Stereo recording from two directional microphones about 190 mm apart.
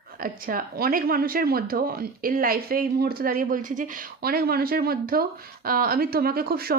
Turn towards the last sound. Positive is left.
turn(degrees=-55)  # may be behind; listen again after turning